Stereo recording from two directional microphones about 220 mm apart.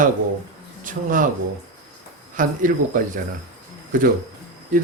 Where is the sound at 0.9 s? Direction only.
35° right (ahead or behind).